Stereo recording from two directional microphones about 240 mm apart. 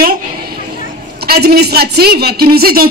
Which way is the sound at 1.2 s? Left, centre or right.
Right.